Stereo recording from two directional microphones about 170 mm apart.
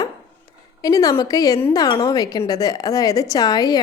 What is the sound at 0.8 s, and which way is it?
A woman's voice, 20° left (ahead or behind).